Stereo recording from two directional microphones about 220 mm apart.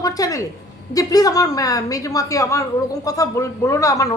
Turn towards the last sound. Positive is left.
turn(degrees=15)  # may be behind; listen again after turning